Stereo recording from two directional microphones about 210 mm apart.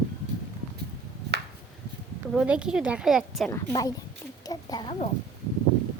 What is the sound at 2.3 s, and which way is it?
A woman's voice, 5° right (ahead or behind).